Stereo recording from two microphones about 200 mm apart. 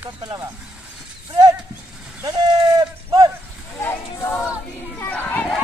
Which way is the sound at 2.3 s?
20° right (ahead or behind).